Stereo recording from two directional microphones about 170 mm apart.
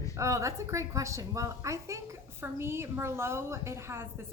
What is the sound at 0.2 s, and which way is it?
A woman's voice, 15° right (ahead or behind).